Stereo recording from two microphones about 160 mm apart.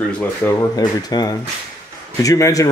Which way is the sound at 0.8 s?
25° left (ahead or behind).